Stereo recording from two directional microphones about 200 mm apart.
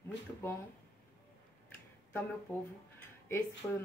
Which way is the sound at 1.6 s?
10° left (ahead or behind).